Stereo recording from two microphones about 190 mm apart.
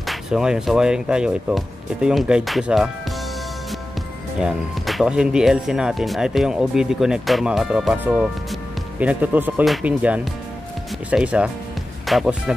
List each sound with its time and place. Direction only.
0.0 s speech: centre (ahead or behind)
4.4 s speech: centre (ahead or behind)